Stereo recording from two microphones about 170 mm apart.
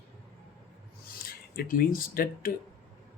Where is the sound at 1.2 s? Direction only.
60° left (ahead or behind).